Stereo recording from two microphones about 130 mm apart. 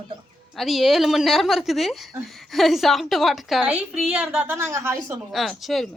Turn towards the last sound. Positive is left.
turn(degrees=0)  # may be behind; listen again after turning